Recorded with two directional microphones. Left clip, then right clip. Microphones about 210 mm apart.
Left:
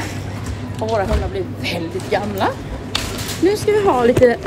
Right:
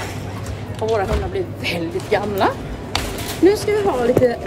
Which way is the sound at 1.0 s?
10° right (ahead or behind).